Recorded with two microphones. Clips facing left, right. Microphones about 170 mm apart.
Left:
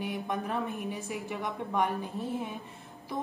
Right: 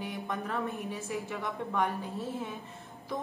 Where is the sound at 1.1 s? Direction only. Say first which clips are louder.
Even; 15° left (ahead or behind).